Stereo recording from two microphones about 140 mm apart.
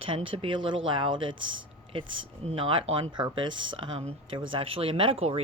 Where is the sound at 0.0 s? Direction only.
40° right (ahead or behind).